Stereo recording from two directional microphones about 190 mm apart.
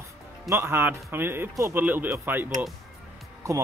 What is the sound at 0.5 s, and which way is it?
Speech, 10° right (ahead or behind).